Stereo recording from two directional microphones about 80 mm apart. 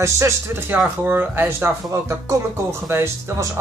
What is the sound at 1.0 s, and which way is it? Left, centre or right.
Speech, right.